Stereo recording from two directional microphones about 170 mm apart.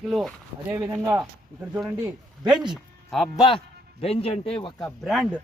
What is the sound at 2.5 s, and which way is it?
Speech, 25° right (ahead or behind).